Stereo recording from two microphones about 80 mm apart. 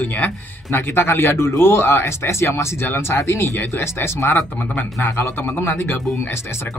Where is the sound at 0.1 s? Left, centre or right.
Left.